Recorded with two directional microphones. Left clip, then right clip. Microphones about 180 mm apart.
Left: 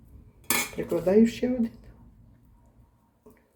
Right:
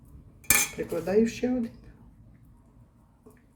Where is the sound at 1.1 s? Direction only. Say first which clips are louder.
Left 3 dB; 45° left (ahead or behind).